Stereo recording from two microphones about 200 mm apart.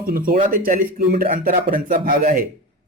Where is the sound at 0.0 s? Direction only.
45° right (ahead or behind).